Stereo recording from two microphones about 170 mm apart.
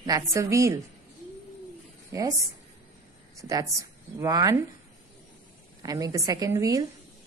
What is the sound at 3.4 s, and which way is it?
Speech, 20° right (ahead or behind).